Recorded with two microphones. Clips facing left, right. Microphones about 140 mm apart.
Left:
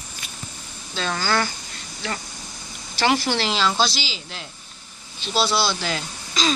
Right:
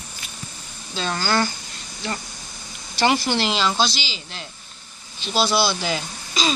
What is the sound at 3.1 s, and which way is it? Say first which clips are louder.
Speech: right 1 dB; centre (ahead or behind).